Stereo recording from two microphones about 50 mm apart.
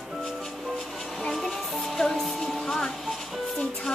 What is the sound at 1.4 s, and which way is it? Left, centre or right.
Music, centre.